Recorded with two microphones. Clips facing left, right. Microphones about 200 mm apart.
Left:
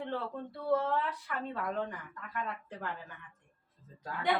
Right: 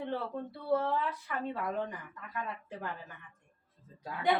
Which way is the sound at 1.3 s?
10° right (ahead or behind).